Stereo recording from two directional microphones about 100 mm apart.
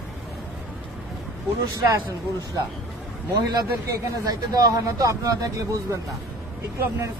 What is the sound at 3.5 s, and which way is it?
Speech, 35° right (ahead or behind).